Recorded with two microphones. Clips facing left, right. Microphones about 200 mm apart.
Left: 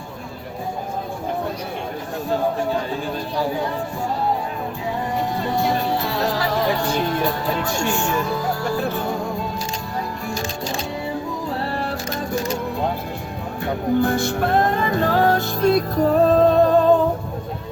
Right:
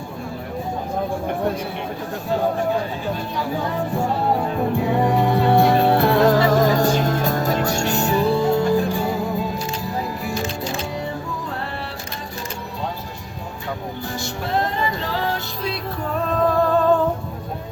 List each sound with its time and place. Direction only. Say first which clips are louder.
4.8 s music: right 5 dB; 60° right (ahead or behind); by 8.8 s 25° right (ahead or behind)
14.0 s music: left 9 dB; 55° left (ahead or behind); by 17.0 s 20° left (ahead or behind)